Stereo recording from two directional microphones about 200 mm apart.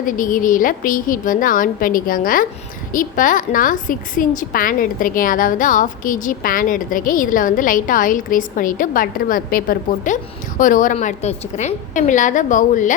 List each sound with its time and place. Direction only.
0.0 s a woman's voice: 40° left (ahead or behind)